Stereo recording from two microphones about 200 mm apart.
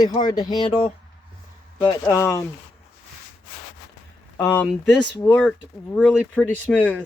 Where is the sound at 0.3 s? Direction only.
20° left (ahead or behind).